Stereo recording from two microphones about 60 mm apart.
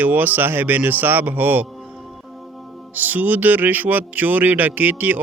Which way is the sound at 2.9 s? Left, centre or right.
Right.